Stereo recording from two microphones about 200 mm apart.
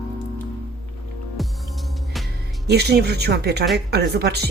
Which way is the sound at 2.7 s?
55° right (ahead or behind).